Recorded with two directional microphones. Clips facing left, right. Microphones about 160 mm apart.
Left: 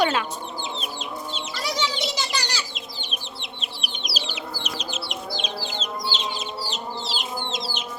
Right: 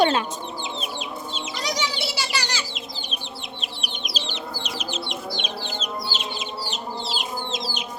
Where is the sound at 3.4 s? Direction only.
Centre (ahead or behind).